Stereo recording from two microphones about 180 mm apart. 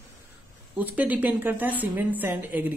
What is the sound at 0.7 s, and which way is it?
Speech, 10° right (ahead or behind).